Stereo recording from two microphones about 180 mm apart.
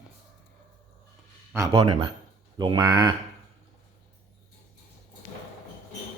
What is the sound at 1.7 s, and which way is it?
A man's voice, 35° right (ahead or behind).